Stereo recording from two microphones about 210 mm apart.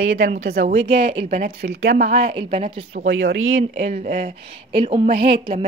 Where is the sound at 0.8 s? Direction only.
25° right (ahead or behind).